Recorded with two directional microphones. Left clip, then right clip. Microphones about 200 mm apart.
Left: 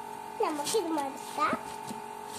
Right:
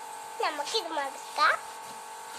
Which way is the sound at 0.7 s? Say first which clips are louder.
Left 4 dB; 10° right (ahead or behind).